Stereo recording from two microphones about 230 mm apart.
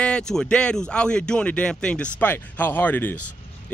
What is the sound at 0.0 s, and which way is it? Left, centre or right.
A man's voice, centre.